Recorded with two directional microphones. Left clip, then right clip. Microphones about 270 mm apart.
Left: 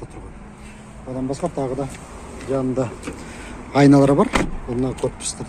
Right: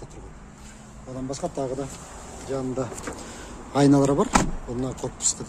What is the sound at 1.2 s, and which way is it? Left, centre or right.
Speech, centre.